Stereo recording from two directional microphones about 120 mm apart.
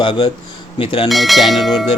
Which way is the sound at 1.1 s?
Centre (ahead or behind).